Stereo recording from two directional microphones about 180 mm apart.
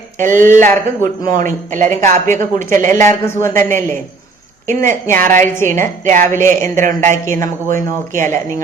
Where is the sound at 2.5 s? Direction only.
15° left (ahead or behind).